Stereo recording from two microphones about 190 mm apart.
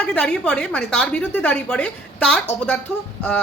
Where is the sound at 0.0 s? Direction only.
5° left (ahead or behind).